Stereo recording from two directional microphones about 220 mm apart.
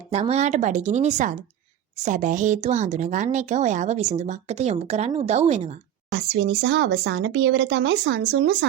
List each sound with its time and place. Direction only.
0.1 s speech: 30° right (ahead or behind)
6.1 s speech: 55° right (ahead or behind)